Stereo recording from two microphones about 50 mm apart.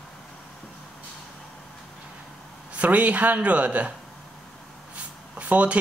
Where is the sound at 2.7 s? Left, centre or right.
Right.